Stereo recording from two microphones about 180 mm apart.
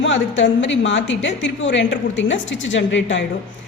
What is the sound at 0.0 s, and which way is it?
A woman's voice, 85° left.